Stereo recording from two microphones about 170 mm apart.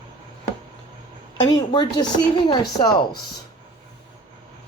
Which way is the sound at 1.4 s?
25° left (ahead or behind).